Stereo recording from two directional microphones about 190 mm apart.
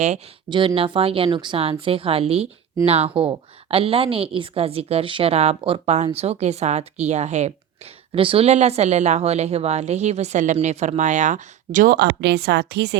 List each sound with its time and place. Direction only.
0.5 s a woman's voice: 25° right (ahead or behind); by 13.0 s 60° right (ahead or behind)